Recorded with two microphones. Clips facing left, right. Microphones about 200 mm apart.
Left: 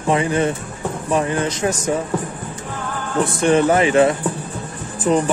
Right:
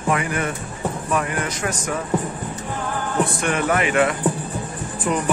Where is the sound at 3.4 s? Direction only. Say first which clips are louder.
Left 11 dB; 30° left (ahead or behind).